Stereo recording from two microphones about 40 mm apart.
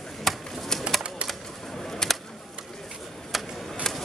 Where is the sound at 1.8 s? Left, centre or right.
Centre.